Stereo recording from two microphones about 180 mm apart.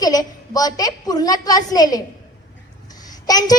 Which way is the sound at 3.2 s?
20° left (ahead or behind).